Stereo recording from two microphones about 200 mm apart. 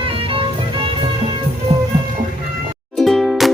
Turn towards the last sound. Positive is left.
turn(degrees=0)  # may be behind; listen again after turning